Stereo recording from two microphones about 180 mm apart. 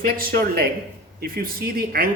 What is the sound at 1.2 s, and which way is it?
Speech, 55° right (ahead or behind).